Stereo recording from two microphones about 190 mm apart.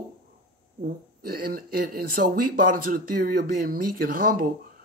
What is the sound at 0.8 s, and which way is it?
Speech, 50° right (ahead or behind).